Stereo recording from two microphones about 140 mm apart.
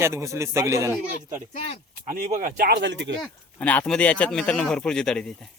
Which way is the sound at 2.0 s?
70° right (ahead or behind).